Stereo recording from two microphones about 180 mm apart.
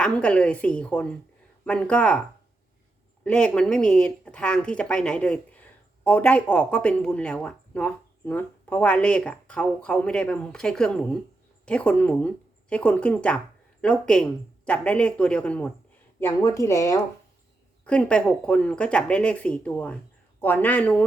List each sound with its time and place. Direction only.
0.0 s speech: 5° left (ahead or behind)
3.2 s speech: 5° left (ahead or behind)
17.8 s speech: 5° left (ahead or behind)